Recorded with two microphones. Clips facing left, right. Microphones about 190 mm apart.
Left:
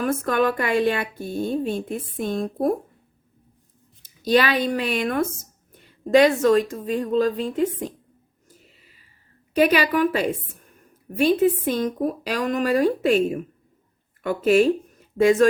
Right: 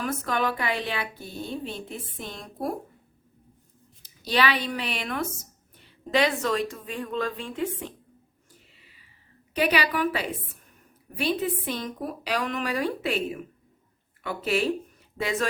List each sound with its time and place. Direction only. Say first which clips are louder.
0.0 s speech: left 6 dB; 50° left (ahead or behind)
4.2 s a woman's voice: left 6 dB; 45° left (ahead or behind)
9.6 s speech: left 6 dB; 45° left (ahead or behind)